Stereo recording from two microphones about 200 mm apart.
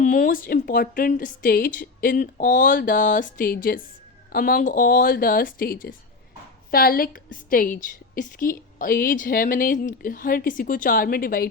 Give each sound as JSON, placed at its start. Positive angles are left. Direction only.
{"t": 0.0, "sound": "a woman's voice", "side_deg": 40}